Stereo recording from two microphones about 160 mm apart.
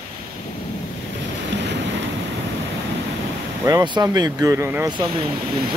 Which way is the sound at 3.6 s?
25° right (ahead or behind).